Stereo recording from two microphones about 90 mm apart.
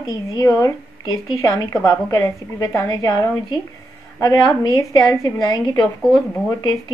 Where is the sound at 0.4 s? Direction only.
40° left (ahead or behind).